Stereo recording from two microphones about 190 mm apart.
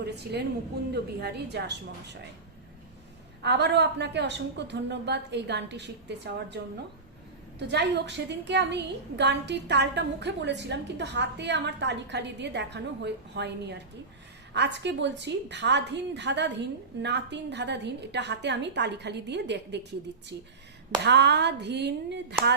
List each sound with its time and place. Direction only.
0.0 s a woman's voice: 60° right (ahead or behind)
3.4 s a woman's voice: 60° right (ahead or behind)
7.7 s a woman's voice: 65° right (ahead or behind)
21.0 s a woman's voice: 60° right (ahead or behind)